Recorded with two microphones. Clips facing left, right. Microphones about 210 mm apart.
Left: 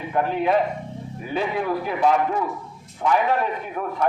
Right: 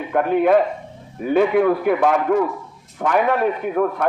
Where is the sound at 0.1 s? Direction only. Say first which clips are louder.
Right 6 dB; 55° right (ahead or behind).